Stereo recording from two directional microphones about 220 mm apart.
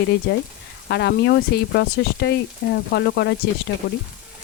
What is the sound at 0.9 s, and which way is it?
Speech, 50° left (ahead or behind).